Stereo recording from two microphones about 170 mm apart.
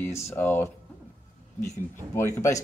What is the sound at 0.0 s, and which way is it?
Speech, 15° left (ahead or behind).